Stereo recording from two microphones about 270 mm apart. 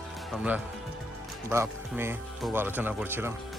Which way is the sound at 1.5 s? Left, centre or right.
Centre.